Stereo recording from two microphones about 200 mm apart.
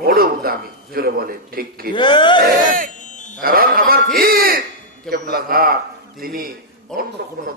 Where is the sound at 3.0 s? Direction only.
40° left (ahead or behind).